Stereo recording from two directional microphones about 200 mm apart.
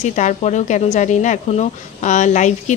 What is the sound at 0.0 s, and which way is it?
A woman's voice, 35° left (ahead or behind).